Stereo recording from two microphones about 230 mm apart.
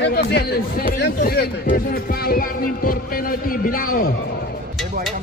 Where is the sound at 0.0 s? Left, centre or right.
Left.